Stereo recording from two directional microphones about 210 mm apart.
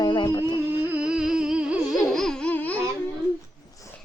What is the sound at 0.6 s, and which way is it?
Music, 10° right (ahead or behind).